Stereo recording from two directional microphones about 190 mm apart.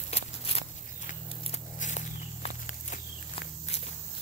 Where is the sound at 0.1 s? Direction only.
30° left (ahead or behind).